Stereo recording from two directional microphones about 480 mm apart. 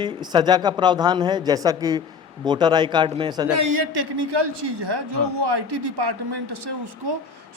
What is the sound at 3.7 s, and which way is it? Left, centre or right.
Speech, right.